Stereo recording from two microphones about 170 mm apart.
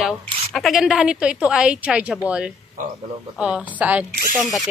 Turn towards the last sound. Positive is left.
turn(degrees=-5)  # may be behind; listen again after turning